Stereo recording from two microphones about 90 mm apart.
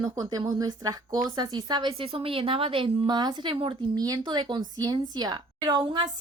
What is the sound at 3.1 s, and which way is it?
Speech, 55° right (ahead or behind).